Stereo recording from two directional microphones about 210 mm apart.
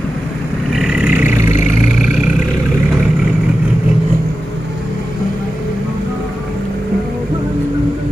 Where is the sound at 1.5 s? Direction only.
35° left (ahead or behind).